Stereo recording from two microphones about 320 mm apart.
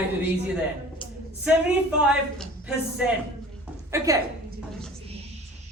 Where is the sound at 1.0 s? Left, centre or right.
Centre.